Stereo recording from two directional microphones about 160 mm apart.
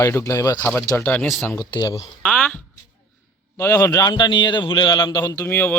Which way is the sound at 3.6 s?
20° left (ahead or behind).